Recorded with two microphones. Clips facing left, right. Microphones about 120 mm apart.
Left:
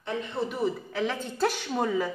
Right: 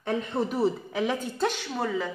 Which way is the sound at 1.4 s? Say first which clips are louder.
Left 5 dB; 5° left (ahead or behind).